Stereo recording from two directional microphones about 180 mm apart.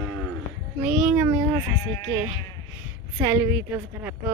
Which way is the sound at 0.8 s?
5° right (ahead or behind).